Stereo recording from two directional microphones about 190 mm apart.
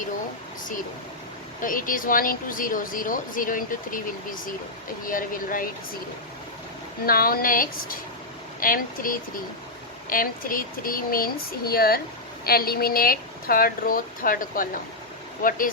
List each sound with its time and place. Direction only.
1.6 s speech: 45° left (ahead or behind)
7.0 s speech: 50° left (ahead or behind)